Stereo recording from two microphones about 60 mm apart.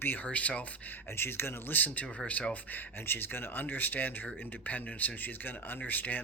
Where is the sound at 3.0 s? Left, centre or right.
Left.